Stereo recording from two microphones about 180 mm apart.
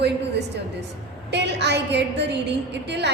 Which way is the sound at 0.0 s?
70° right (ahead or behind).